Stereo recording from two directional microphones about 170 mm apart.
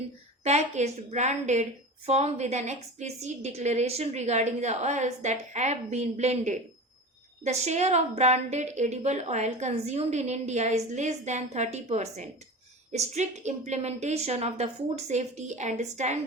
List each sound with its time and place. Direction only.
0.4 s a woman's voice: 40° right (ahead or behind)